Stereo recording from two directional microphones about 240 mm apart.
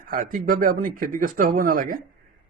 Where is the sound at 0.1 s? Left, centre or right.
Right.